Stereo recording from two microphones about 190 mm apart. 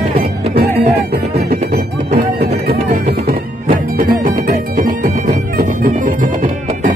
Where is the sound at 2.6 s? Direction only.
50° right (ahead or behind).